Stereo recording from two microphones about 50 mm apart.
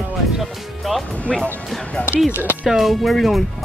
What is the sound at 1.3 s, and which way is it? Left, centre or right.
Speech, centre.